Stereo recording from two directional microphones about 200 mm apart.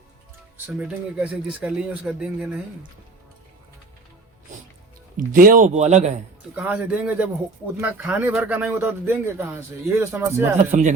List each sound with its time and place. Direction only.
0.5 s speech: 5° right (ahead or behind)
5.1 s speech: 45° right (ahead or behind)
6.6 s speech: 5° right (ahead or behind)
10.6 s speech: 40° right (ahead or behind)